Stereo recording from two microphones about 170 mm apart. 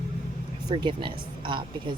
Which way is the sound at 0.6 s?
30° right (ahead or behind).